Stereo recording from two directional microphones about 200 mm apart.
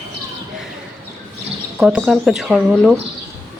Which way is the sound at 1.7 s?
5° right (ahead or behind).